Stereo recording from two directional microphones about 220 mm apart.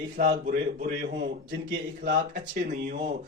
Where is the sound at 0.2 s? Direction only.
40° right (ahead or behind).